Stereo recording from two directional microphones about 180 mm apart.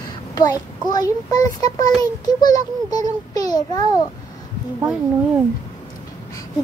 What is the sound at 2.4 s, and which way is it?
A child's voice, 20° left (ahead or behind).